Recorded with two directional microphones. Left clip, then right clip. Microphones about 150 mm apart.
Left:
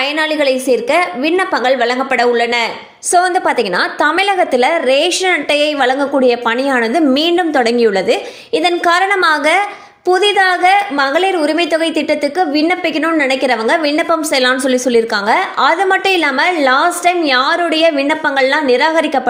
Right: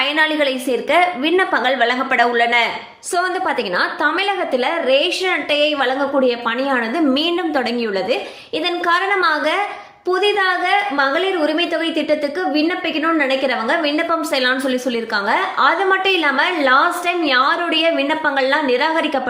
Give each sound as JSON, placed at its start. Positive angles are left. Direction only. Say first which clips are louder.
{"t": 0.0, "sound": "a woman's voice", "louder": "left 2 dB", "side_deg": 30}
{"t": 3.1, "sound": "a woman's voice", "louder": "left 7 dB", "side_deg": 55}